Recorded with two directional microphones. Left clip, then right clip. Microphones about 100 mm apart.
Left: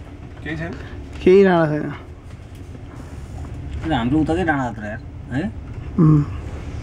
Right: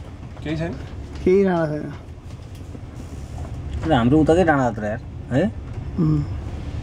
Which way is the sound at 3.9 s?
20° right (ahead or behind).